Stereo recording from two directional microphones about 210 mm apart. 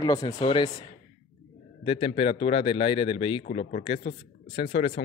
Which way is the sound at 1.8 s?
25° left (ahead or behind).